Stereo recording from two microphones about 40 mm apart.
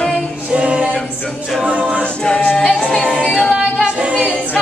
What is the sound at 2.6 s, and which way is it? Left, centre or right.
Music, left.